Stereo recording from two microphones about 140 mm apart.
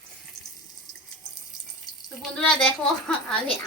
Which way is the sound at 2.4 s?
5° left (ahead or behind).